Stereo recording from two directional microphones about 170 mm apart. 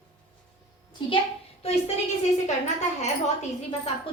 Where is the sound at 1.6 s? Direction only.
35° left (ahead or behind).